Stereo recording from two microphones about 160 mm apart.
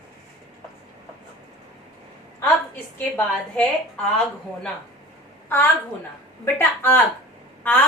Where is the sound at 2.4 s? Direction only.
10° left (ahead or behind).